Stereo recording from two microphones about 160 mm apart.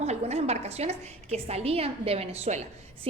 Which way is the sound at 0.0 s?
40° right (ahead or behind).